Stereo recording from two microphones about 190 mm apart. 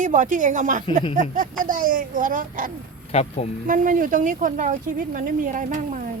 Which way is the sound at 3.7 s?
45° right (ahead or behind).